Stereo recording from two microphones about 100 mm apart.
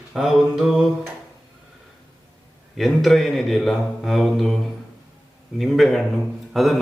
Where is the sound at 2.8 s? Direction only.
Centre (ahead or behind).